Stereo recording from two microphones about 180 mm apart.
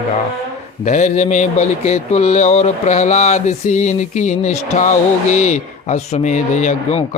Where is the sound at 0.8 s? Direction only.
40° left (ahead or behind).